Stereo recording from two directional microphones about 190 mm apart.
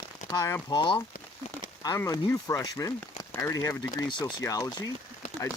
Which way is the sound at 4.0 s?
20° left (ahead or behind).